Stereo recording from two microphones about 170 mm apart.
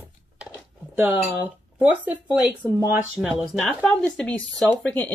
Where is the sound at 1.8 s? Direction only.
10° right (ahead or behind).